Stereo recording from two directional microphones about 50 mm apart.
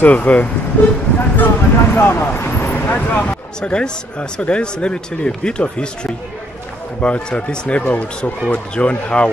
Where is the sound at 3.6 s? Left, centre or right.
Centre.